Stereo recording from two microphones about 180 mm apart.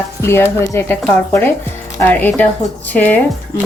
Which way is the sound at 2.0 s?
10° left (ahead or behind).